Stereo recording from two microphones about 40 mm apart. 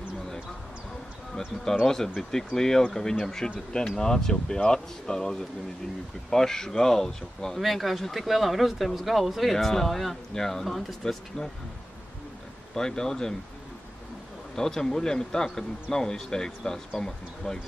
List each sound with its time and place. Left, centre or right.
1.3 s speech: centre
7.6 s speech: centre
12.7 s speech: centre
14.5 s speech: centre